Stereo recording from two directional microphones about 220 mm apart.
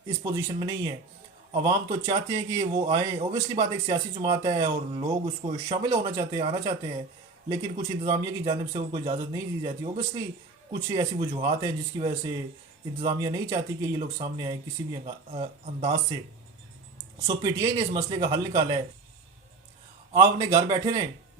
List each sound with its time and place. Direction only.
0.2 s a man's voice: 20° right (ahead or behind)
17.2 s a man's voice: 15° right (ahead or behind)
20.5 s a man's voice: 20° right (ahead or behind)